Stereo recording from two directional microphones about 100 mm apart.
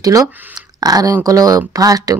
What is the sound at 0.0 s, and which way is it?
Speech, 35° right (ahead or behind).